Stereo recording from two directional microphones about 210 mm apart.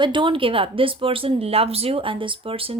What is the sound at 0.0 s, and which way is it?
Speech, 25° right (ahead or behind).